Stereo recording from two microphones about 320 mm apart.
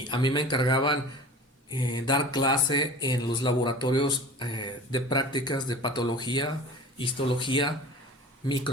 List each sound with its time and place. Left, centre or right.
0.1 s speech: centre